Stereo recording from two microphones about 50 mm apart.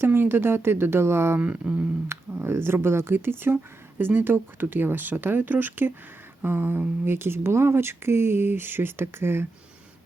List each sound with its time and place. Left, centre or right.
0.0 s speech: right
1.4 s a sound: right
2.4 s speech: right